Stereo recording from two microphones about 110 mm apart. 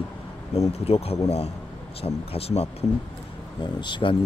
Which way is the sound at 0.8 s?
70° left (ahead or behind).